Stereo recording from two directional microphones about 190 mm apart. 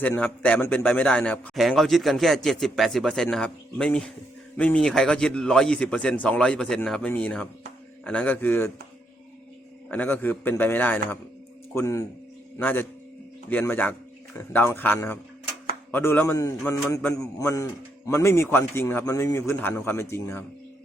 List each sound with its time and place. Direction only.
0.0 s a man's voice: 10° left (ahead or behind)
9.9 s a man's voice: 10° left (ahead or behind)